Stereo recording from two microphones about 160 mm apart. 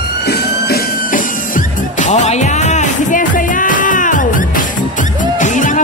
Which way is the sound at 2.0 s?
45° left (ahead or behind).